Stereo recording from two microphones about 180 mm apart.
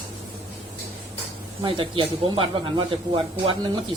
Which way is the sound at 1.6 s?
30° right (ahead or behind).